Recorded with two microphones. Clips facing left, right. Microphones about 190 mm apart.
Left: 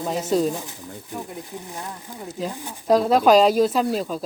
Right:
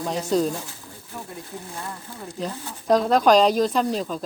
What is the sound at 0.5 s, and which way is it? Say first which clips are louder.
Speech: left 2 dB; 15° left (ahead or behind).